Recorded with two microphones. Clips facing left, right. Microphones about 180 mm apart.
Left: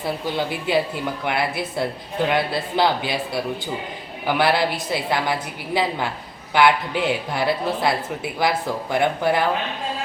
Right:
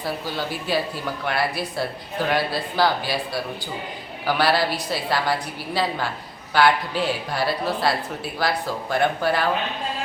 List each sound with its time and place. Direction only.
0.3 s a woman's voice: 20° left (ahead or behind)
4.3 s a woman's voice: 20° left (ahead or behind)
6.5 s a woman's voice: 20° left (ahead or behind)